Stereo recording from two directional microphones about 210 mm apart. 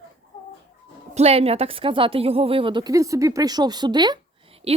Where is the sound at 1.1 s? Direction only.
30° right (ahead or behind).